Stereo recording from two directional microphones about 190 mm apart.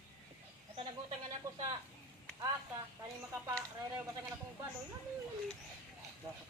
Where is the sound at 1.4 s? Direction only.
15° right (ahead or behind).